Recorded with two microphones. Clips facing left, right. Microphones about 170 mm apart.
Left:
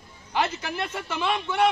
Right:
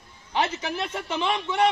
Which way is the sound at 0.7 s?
5° left (ahead or behind).